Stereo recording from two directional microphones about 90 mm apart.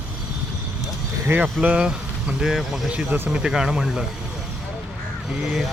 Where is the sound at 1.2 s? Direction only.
20° right (ahead or behind); by 2.9 s 5° right (ahead or behind).